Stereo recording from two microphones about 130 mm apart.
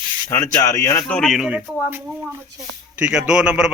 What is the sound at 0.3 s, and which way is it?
Speech, 25° left (ahead or behind).